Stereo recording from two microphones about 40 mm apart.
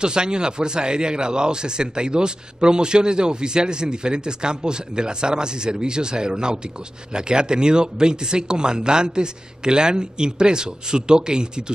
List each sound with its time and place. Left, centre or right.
0.0 s a man's voice: right